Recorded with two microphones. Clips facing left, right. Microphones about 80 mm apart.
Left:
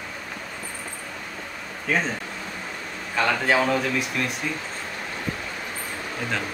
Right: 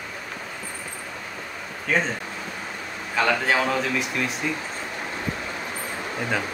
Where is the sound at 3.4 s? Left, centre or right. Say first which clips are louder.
Left 1 dB; centre.